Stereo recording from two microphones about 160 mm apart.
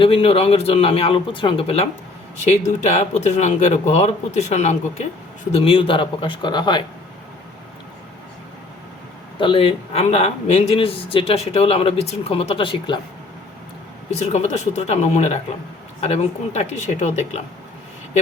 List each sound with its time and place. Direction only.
0.0 s speech: 35° left (ahead or behind)
5.5 s speech: 35° left (ahead or behind)
9.4 s speech: 35° left (ahead or behind)
14.1 s speech: 45° left (ahead or behind)